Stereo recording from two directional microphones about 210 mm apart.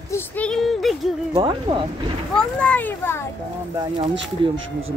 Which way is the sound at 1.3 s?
25° right (ahead or behind).